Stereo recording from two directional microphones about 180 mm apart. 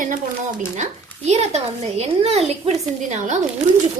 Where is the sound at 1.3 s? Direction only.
35° right (ahead or behind).